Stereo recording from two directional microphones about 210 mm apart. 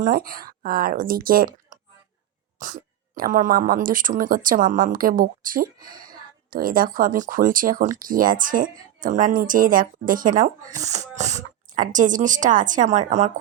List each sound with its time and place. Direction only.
0.0 s speech: 45° right (ahead or behind)
3.2 s speech: 40° right (ahead or behind)